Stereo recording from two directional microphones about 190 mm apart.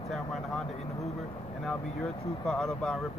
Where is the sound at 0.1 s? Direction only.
Centre (ahead or behind).